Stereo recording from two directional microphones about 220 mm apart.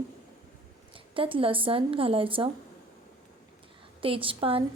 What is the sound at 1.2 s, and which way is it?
A woman's voice, 25° right (ahead or behind).